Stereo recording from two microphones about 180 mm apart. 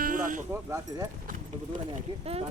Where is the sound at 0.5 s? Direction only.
15° right (ahead or behind).